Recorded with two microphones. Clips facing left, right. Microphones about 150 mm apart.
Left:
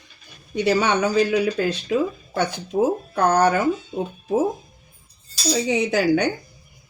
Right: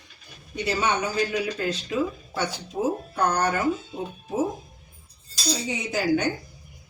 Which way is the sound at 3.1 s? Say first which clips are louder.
Left 7 dB; 85° left.